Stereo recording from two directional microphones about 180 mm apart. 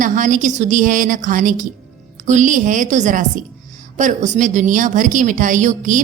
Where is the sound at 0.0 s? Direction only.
45° right (ahead or behind).